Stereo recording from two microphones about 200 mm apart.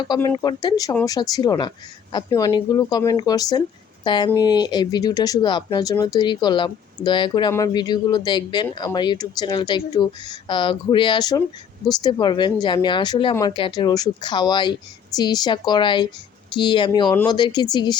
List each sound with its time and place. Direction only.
0.0 s speech: 20° left (ahead or behind)